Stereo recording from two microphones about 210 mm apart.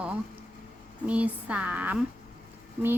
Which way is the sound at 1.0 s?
5° right (ahead or behind).